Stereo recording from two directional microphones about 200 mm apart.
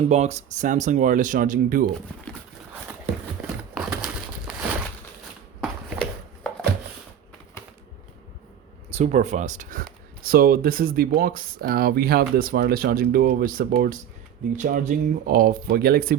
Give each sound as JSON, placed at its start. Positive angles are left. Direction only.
{"t": 0.1, "sound": "speech", "side_deg": -35}
{"t": 3.4, "sound": "crumpling", "side_deg": 0}
{"t": 5.5, "sound": "a sound", "side_deg": 0}
{"t": 8.9, "sound": "speech", "side_deg": -35}